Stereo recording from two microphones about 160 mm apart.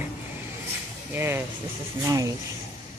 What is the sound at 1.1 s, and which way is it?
Speech, 15° right (ahead or behind).